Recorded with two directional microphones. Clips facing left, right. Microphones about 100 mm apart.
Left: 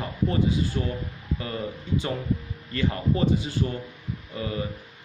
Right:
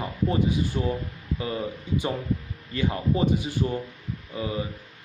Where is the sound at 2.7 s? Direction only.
15° right (ahead or behind).